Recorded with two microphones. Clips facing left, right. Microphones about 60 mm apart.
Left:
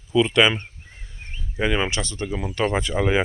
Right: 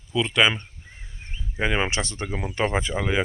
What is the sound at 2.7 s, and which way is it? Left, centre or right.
Speech, centre.